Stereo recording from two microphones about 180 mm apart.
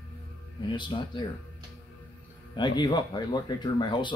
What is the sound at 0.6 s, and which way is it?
Speech, 25° left (ahead or behind).